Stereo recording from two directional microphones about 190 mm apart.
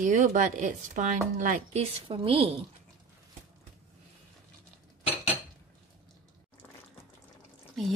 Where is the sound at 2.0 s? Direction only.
30° right (ahead or behind).